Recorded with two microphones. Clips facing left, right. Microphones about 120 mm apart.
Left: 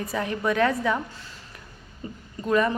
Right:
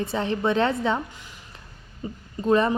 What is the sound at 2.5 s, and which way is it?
Speech, 30° right (ahead or behind).